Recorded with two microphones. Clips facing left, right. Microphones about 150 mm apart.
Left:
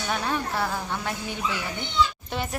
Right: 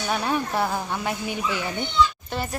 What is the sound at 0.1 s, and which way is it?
A woman's voice, 15° right (ahead or behind).